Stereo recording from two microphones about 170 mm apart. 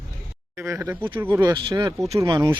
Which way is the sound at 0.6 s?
15° right (ahead or behind).